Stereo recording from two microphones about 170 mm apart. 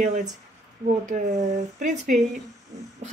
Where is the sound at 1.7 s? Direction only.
50° right (ahead or behind).